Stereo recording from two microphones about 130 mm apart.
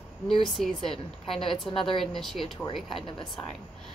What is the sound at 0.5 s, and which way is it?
A woman's voice, centre (ahead or behind).